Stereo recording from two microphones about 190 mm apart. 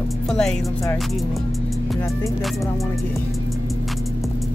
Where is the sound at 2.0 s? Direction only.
15° left (ahead or behind).